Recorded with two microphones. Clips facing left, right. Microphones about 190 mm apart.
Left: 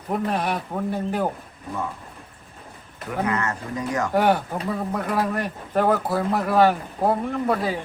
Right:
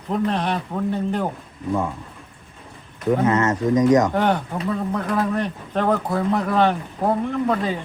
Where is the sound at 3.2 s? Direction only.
20° right (ahead or behind).